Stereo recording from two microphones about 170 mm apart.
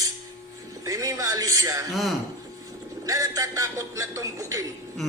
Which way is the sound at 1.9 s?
Centre (ahead or behind).